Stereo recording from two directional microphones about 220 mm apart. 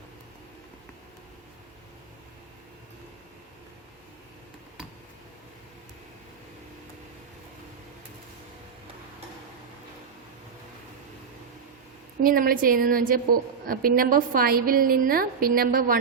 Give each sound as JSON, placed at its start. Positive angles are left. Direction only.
{"t": 12.2, "sound": "a woman's voice", "side_deg": -40}